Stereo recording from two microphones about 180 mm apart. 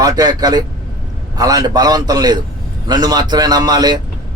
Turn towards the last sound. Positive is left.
turn(degrees=-20)  # may be behind; listen again after turning